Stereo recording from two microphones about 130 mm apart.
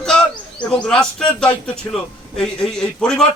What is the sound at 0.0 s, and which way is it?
Bird, 5° left (ahead or behind).